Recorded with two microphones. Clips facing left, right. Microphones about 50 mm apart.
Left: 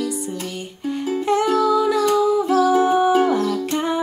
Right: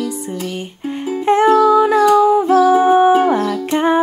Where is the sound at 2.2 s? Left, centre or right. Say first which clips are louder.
Right 6 dB; right.